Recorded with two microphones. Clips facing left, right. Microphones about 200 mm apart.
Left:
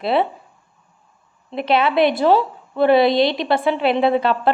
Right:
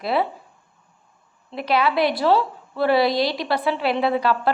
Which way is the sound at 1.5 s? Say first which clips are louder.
Left 3 dB; 25° left (ahead or behind).